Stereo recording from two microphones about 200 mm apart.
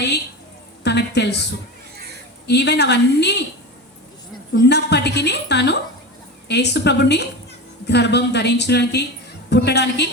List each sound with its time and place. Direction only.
0.9 s a woman's voice: 60° left (ahead or behind)
2.5 s a woman's voice: 55° left (ahead or behind)
4.5 s a woman's voice: 55° left (ahead or behind)